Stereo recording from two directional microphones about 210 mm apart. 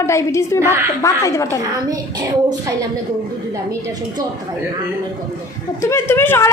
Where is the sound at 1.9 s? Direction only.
20° right (ahead or behind).